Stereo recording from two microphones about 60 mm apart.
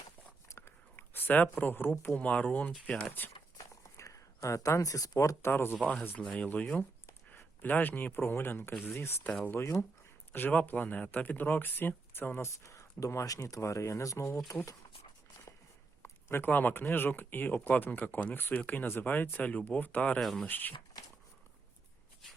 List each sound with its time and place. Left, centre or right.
0.4 s biting: left
0.9 s speech: left
3.6 s a sound: left
5.5 s speech: left
6.1 s speech: centre; by 9.7 s left
10.3 s speech: left
12.4 s speech: left
14.3 s speech: left
16.0 s speech: left
20.1 s speech: centre
20.5 s speech: left